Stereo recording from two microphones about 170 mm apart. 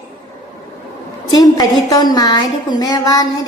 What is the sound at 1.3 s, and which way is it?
A woman's voice, 25° left (ahead or behind).